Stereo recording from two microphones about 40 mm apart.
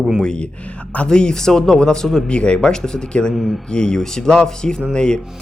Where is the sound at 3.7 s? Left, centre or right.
Centre.